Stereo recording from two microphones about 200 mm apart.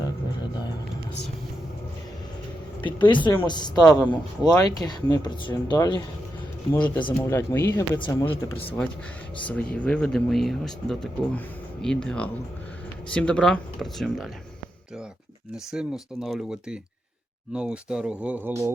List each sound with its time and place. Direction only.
2.8 s speech: 25° left (ahead or behind)
6.7 s speech: 5° left (ahead or behind)
7.9 s speech: 25° left (ahead or behind)
8.2 s speech: 10° left (ahead or behind)
15.5 s speech: 5° right (ahead or behind)